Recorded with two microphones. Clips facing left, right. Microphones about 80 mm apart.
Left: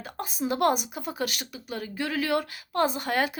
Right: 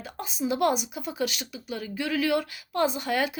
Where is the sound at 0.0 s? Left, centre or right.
Left.